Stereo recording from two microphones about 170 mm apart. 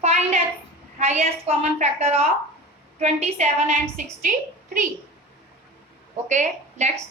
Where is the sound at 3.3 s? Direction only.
40° right (ahead or behind).